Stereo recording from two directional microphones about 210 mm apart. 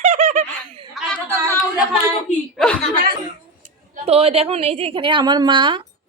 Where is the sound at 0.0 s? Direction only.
35° right (ahead or behind).